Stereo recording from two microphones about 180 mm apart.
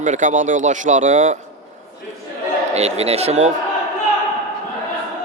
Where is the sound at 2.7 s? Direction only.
35° right (ahead or behind).